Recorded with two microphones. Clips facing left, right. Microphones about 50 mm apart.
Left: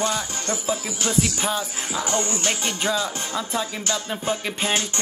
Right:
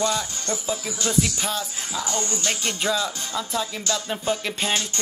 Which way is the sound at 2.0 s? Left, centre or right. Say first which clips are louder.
Left 3 dB; left.